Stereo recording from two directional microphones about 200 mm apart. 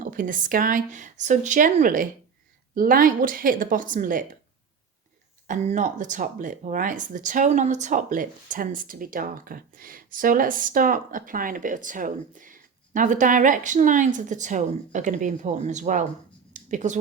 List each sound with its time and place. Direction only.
0.0 s speech: 40° right (ahead or behind)
5.5 s speech: 40° right (ahead or behind)
16.5 s a sound: 40° right (ahead or behind)